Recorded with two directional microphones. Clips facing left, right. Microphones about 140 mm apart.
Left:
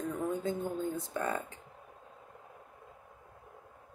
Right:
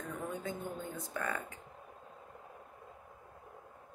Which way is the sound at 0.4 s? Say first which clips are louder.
Left 6 dB; 30° left (ahead or behind).